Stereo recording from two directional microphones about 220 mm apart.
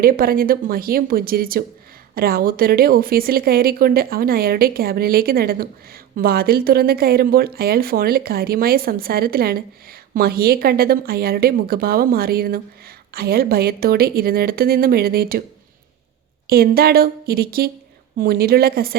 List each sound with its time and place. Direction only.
0.0 s speech: 40° right (ahead or behind)
16.5 s speech: 45° right (ahead or behind)